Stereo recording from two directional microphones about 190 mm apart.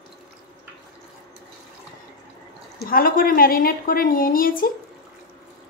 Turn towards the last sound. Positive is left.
turn(degrees=50)  # may be behind; listen again after turning